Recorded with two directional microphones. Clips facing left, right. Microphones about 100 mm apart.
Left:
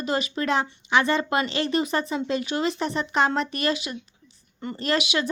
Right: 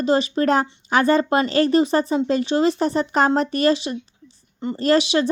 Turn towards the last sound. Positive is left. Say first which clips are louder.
# right 7 dB
turn(degrees=-35)  # may be behind; listen again after turning